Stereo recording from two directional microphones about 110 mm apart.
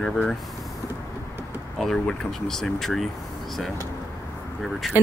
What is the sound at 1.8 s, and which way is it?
Speech, 5° left (ahead or behind).